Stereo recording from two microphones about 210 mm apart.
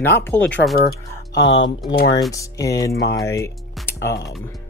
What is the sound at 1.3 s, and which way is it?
Speech, 55° left (ahead or behind).